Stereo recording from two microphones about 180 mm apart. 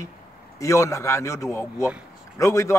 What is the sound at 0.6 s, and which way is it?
A man's voice, 15° left (ahead or behind).